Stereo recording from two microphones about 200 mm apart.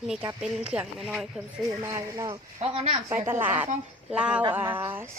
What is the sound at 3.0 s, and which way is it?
Speech, 10° right (ahead or behind).